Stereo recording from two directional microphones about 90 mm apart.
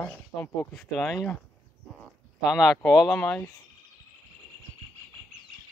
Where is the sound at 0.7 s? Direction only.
Centre (ahead or behind).